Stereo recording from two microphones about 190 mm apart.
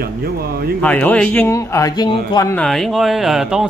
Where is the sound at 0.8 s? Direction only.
10° left (ahead or behind).